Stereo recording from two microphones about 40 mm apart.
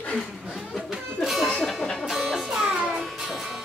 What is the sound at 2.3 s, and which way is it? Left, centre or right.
Music, centre.